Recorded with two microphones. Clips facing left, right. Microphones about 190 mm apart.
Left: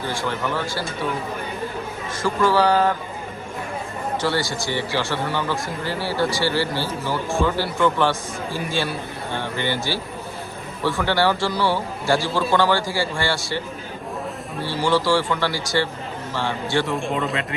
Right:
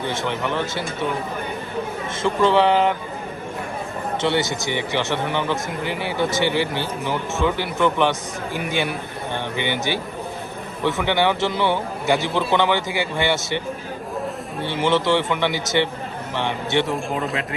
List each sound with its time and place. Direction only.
0.1 s a man's voice: 20° right (ahead or behind)
2.2 s a man's voice: 25° right (ahead or behind)
4.2 s a man's voice: 20° right (ahead or behind)
14.6 s a man's voice: 20° right (ahead or behind)
16.8 s a man's voice: centre (ahead or behind)